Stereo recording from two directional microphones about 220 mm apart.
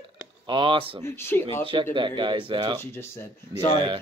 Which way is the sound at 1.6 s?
25° right (ahead or behind).